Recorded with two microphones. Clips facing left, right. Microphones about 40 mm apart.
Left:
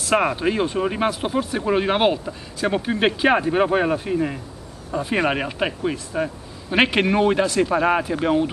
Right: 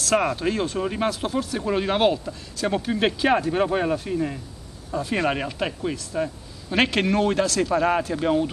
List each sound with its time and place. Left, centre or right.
0.0 s speech: centre